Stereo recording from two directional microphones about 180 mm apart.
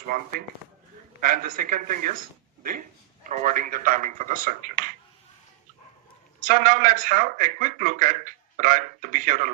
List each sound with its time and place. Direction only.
1.2 s speech: 50° right (ahead or behind)
3.2 s speech: 45° right (ahead or behind)
6.4 s speech: 50° right (ahead or behind)